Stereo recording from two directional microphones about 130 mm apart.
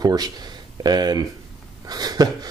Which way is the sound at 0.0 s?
30° right (ahead or behind).